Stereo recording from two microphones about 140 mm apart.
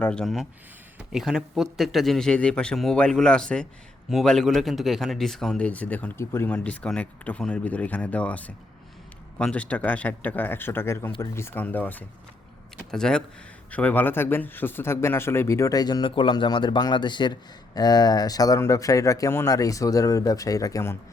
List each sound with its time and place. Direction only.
0.0 s a man's voice: 5° left (ahead or behind)